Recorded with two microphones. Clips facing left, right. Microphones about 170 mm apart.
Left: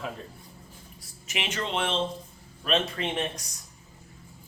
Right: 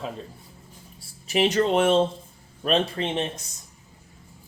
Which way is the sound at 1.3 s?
35° right (ahead or behind).